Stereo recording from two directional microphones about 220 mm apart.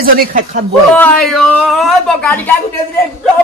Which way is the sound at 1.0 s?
Centre (ahead or behind).